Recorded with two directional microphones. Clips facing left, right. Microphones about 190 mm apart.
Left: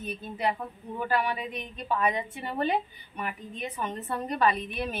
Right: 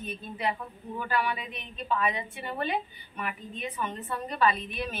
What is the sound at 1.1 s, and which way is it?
A woman's voice, 40° left (ahead or behind).